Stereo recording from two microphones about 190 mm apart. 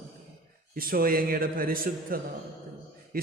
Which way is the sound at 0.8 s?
50° right (ahead or behind).